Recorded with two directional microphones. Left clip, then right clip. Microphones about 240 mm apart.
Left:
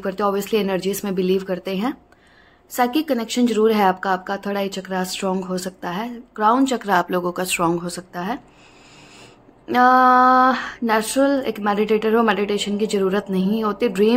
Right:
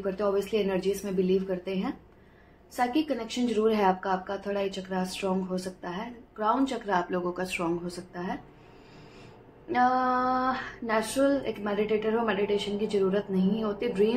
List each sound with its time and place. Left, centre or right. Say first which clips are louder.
0.0 s a woman's voice: left 6 dB; left
9.7 s a woman's voice: left 11 dB; left